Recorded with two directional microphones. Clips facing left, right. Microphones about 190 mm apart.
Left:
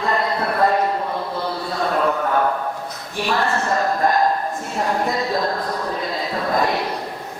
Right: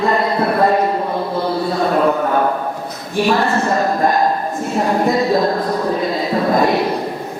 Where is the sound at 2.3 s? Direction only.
15° right (ahead or behind).